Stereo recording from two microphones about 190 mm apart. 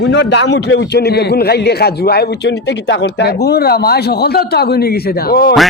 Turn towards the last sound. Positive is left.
turn(degrees=50)  # may be behind; listen again after turning